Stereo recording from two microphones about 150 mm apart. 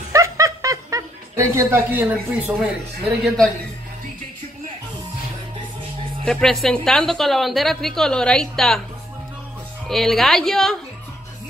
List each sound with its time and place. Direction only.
0.1 s snicker: 20° right (ahead or behind)
6.2 s a woman's voice: centre (ahead or behind)
9.8 s a woman's voice: centre (ahead or behind)